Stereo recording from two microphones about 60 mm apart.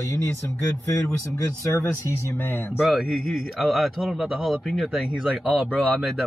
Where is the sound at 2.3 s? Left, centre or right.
Left.